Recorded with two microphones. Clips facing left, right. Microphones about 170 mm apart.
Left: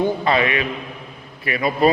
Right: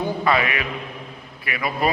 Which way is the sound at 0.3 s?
25° left (ahead or behind).